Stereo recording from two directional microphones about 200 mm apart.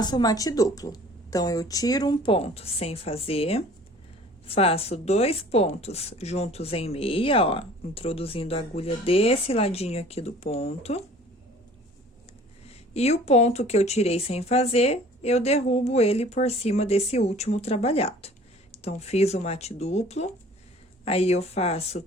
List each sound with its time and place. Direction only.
0.0 s a woman's voice: 20° left (ahead or behind)
12.9 s a woman's voice: 30° left (ahead or behind)